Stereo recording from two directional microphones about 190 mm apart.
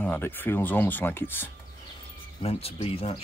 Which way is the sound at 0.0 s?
10° left (ahead or behind).